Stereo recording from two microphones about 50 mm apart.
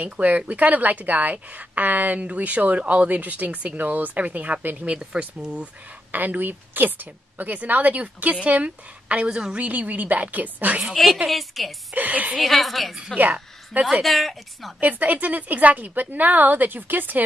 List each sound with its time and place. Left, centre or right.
0.0 s a woman's voice: right
6.1 s a woman's voice: right
10.8 s speech: centre
11.9 s a woman's voice: right
12.4 s speech: centre
13.7 s a woman's voice: right
14.0 s speech: centre
14.8 s a woman's voice: right